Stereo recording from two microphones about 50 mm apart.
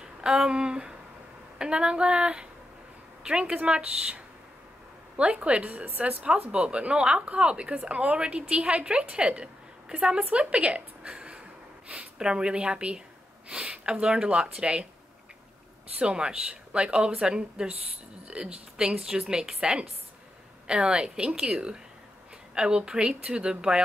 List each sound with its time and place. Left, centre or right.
0.0 s a woman's voice: centre
11.1 s a sound: centre
11.9 s a woman's voice: centre
16.0 s a woman's voice: centre